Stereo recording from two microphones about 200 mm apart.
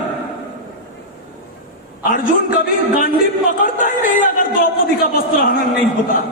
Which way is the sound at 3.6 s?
40° left (ahead or behind).